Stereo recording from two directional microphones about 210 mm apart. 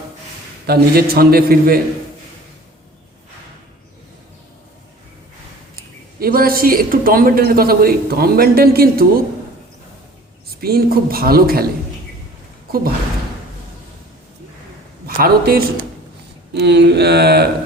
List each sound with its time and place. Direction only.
0.7 s speech: 45° right (ahead or behind)
5.7 s speech: 45° right (ahead or behind)
10.6 s speech: 45° right (ahead or behind)
15.0 s a man's voice: 45° right (ahead or behind)